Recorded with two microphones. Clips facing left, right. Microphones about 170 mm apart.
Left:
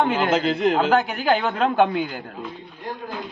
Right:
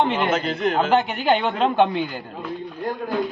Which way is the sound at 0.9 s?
Centre (ahead or behind).